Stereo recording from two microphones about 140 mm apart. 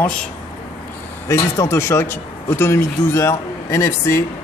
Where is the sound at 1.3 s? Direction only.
20° left (ahead or behind).